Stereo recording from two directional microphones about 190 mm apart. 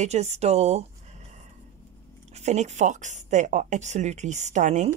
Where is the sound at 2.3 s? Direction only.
35° right (ahead or behind).